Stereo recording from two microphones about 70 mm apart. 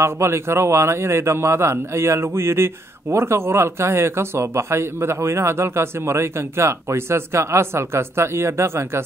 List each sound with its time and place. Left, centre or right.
0.0 s a man's voice: right